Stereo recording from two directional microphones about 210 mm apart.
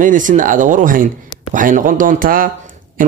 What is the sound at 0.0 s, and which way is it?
A man's voice, 40° right (ahead or behind).